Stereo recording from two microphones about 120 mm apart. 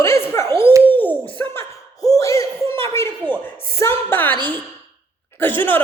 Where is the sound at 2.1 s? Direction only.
25° left (ahead or behind).